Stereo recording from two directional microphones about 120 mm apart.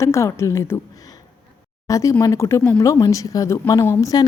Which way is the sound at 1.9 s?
25° left (ahead or behind).